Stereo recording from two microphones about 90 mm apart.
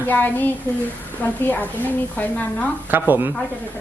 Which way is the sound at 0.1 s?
20° left (ahead or behind).